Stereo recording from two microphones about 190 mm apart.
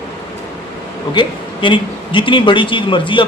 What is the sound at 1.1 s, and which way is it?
Speech, 25° left (ahead or behind).